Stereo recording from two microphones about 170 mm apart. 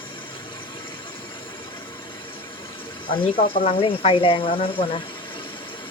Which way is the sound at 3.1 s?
30° left (ahead or behind).